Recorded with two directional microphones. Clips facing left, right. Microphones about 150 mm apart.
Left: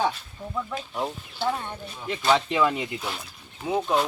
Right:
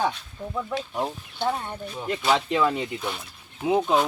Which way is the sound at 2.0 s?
Centre (ahead or behind).